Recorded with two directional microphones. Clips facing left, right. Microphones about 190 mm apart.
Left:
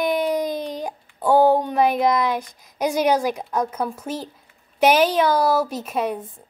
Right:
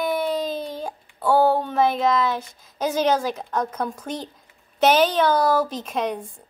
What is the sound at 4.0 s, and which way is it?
A woman's voice, 5° left (ahead or behind).